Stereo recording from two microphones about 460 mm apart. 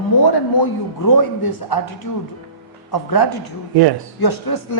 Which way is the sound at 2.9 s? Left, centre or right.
Left.